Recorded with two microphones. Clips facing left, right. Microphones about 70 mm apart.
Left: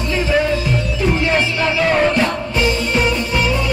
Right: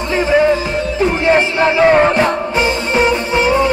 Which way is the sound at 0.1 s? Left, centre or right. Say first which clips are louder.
Right 5 dB; right.